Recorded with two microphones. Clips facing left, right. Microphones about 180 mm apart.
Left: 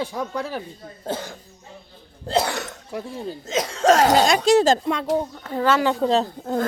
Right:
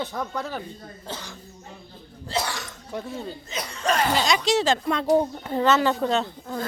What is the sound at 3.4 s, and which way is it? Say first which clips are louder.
Speech: left 10 dB; 90° left.